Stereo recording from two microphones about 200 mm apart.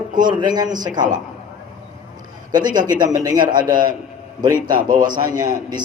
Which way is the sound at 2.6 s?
20° right (ahead or behind).